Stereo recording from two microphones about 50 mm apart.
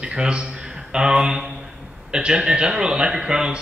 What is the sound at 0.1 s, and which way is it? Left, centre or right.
A man's voice, centre.